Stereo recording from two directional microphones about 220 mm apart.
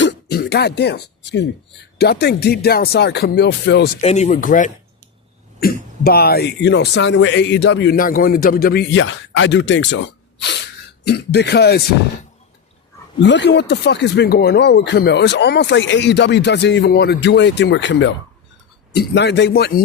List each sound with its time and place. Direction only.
0.0 s speech: 50° left (ahead or behind)
4.0 s speech: 30° left (ahead or behind); by 10.0 s 55° left (ahead or behind)
11.0 s speech: 50° left (ahead or behind)
13.2 s speech: 50° left (ahead or behind)